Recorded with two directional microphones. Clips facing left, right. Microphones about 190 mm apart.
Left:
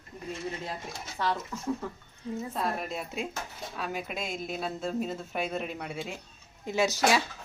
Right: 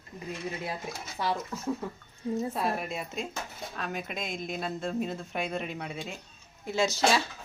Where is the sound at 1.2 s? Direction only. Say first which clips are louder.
Even; 10° right (ahead or behind).